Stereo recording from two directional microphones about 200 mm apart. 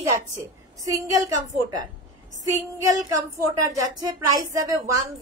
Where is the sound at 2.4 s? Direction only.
15° right (ahead or behind).